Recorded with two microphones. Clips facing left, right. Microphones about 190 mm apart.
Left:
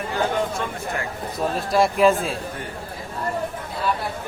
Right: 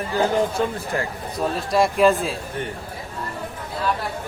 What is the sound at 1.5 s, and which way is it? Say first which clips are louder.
Speech: even; centre (ahead or behind).